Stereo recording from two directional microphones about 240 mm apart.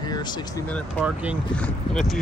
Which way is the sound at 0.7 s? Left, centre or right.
Centre.